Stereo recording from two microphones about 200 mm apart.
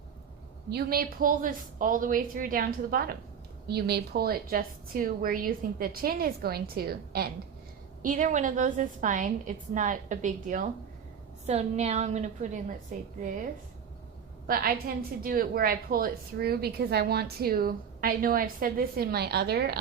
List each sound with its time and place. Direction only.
0.7 s a woman's voice: 50° right (ahead or behind)
8.0 s a woman's voice: 40° right (ahead or behind)
14.4 s a woman's voice: 45° right (ahead or behind)